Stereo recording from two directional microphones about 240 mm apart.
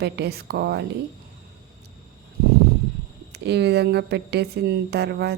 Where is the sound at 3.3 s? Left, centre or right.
Right.